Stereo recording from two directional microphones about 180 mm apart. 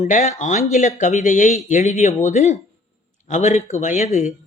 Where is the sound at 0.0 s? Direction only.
40° left (ahead or behind).